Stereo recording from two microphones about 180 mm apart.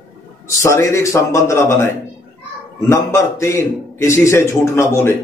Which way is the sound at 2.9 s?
15° left (ahead or behind).